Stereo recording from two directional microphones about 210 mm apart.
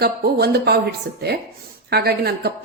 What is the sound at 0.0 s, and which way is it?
Speech, 50° right (ahead or behind).